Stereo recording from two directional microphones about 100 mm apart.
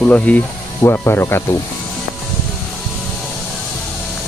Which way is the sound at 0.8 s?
25° left (ahead or behind).